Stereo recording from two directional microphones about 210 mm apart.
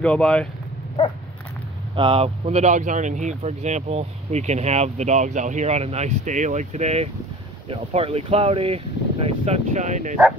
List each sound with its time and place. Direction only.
0.0 s speech: 5° left (ahead or behind)
2.0 s speech: 25° right (ahead or behind)